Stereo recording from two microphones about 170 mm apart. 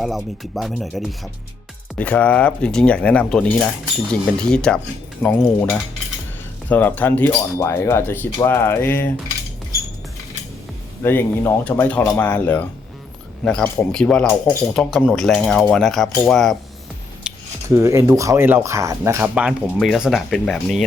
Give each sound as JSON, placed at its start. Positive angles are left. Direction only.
{"t": 0.0, "sound": "speech", "side_deg": 0}
{"t": 11.0, "sound": "speech", "side_deg": 10}
{"t": 17.2, "sound": "a sound", "side_deg": -5}
{"t": 17.8, "sound": "speech", "side_deg": -15}
{"t": 19.3, "sound": "speech", "side_deg": -5}